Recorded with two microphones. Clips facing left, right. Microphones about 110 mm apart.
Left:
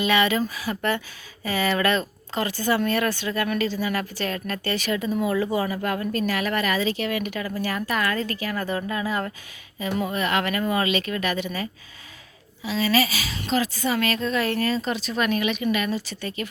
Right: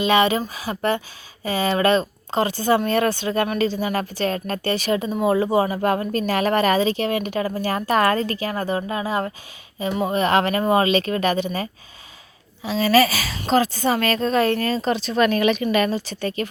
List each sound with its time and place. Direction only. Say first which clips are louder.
0.0 s speech: right 3 dB; 25° right (ahead or behind)
15.2 s speech: right 5 dB; 45° right (ahead or behind)